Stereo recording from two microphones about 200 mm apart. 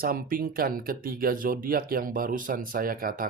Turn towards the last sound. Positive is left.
turn(degrees=-45)  # may be behind; listen again after turning